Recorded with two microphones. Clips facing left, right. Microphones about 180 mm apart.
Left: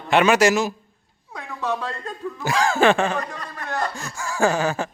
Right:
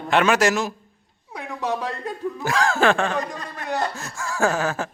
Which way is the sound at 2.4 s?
Centre (ahead or behind).